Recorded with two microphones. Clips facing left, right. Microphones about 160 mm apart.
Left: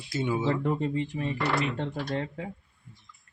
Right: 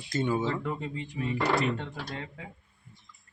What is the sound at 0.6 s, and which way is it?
Speech, 45° left (ahead or behind).